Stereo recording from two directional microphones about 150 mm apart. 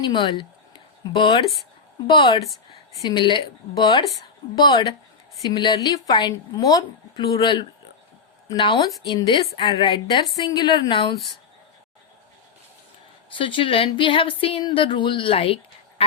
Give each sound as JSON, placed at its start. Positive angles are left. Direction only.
{"t": 0.0, "sound": "speech", "side_deg": 30}
{"t": 4.5, "sound": "a woman's voice", "side_deg": 25}
{"t": 13.3, "sound": "speech", "side_deg": 35}